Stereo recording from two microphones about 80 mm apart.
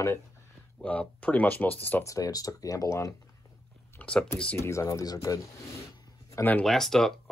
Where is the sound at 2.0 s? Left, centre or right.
Left.